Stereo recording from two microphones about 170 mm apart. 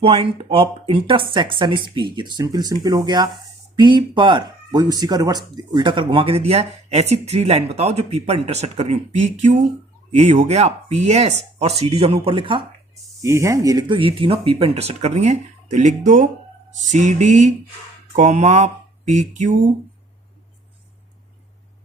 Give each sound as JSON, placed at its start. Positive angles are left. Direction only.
{"t": 0.0, "sound": "speech", "side_deg": -35}
{"t": 13.2, "sound": "speech", "side_deg": -15}
{"t": 16.9, "sound": "music", "side_deg": -45}
{"t": 18.2, "sound": "speech", "side_deg": -45}